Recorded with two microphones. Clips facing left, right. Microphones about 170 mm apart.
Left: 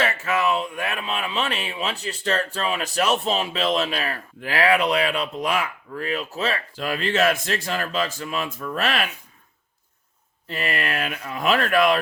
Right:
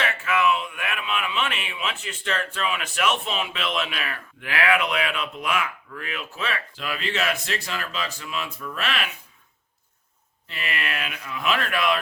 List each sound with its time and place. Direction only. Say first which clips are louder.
0.0 s speech: left 1 dB; 40° left (ahead or behind)
10.5 s speech: left 5 dB; 40° left (ahead or behind)